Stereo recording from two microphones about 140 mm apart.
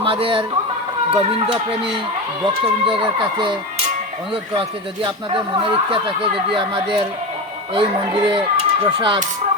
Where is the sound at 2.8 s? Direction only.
35° right (ahead or behind).